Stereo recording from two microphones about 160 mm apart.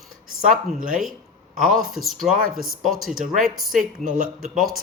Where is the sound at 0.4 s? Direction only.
55° right (ahead or behind).